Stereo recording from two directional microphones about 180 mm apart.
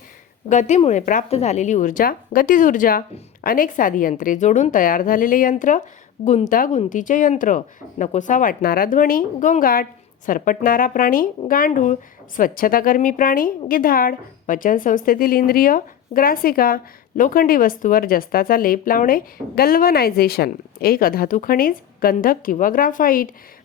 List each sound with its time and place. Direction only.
0.4 s a woman's voice: 40° left (ahead or behind)